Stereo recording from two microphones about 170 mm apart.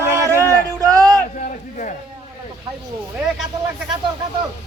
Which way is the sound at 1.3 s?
50° left (ahead or behind).